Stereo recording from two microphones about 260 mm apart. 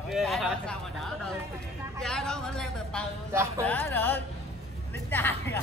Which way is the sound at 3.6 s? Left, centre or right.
Centre.